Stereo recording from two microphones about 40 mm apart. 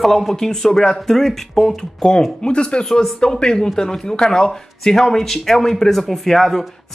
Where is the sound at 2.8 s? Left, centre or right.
Centre.